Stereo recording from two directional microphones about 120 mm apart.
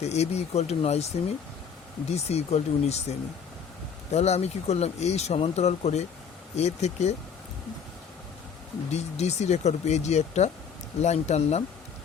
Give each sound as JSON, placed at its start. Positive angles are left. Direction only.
{"t": 0.0, "sound": "speech", "side_deg": 65}
{"t": 8.9, "sound": "speech", "side_deg": 65}